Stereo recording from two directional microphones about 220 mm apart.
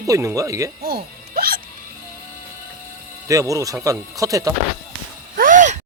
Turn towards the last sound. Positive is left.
turn(degrees=-35)  # may be behind; listen again after turning